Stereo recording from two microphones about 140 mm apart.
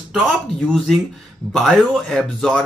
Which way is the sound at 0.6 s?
Centre (ahead or behind).